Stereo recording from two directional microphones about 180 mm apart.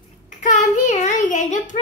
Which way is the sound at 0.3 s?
45° left (ahead or behind).